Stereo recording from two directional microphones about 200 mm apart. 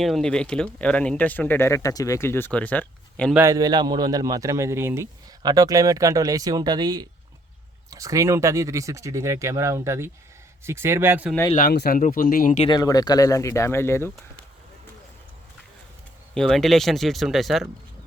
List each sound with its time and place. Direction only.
0.0 s speech: centre (ahead or behind)
3.3 s a man's voice: 15° right (ahead or behind)
11.5 s speech: 50° left (ahead or behind)
12.6 s speech: 20° left (ahead or behind)
16.3 s speech: centre (ahead or behind)